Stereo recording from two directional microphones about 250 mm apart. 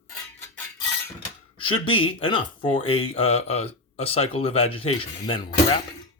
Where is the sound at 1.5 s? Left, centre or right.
Centre.